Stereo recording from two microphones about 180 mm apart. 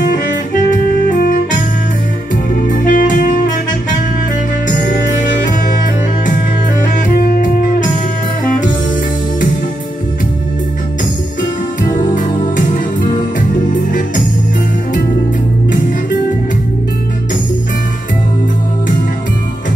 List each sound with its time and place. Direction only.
1.1 s music: 50° left (ahead or behind)
2.7 s music: 50° left (ahead or behind)
4.7 s music: 50° left (ahead or behind)
6.8 s music: 55° left (ahead or behind)
11.8 s music: 45° left (ahead or behind)